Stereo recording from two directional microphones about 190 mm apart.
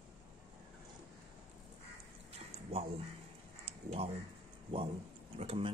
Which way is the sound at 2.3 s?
35° right (ahead or behind).